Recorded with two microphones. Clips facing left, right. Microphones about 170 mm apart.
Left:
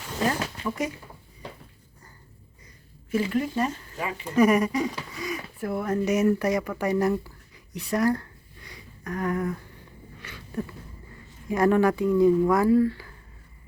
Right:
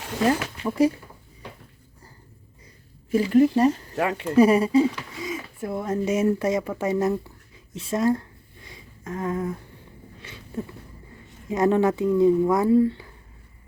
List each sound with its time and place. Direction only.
0.6 s speech: 30° right (ahead or behind)
3.1 s speech: 40° right (ahead or behind)
3.9 s speech: 65° right (ahead or behind)
4.4 s speech: 30° right (ahead or behind)
7.8 s a sound: 25° right (ahead or behind)
11.4 s speech: 20° right (ahead or behind)